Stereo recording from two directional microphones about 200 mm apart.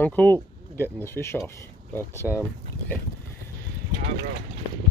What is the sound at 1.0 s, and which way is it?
Speech, 10° left (ahead or behind).